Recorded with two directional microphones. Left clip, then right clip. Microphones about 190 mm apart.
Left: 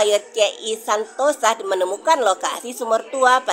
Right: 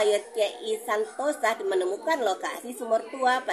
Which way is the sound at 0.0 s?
20° left (ahead or behind).